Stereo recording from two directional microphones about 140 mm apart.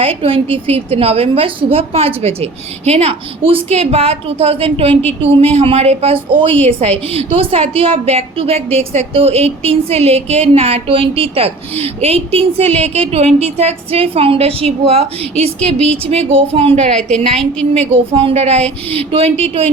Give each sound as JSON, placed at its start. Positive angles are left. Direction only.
{"t": 0.0, "sound": "a woman's voice", "side_deg": -40}